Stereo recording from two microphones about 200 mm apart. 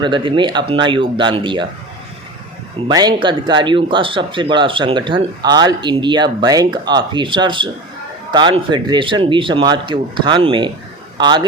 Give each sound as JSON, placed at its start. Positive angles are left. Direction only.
{"t": 0.0, "sound": "speech", "side_deg": -25}
{"t": 2.8, "sound": "speech", "side_deg": -20}